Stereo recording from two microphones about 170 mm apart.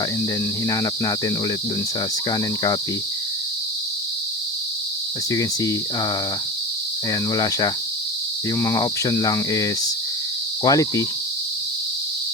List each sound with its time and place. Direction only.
0.7 s cricket: 20° left (ahead or behind)
5.3 s cricket: 20° left (ahead or behind)
7.1 s cricket: 20° left (ahead or behind)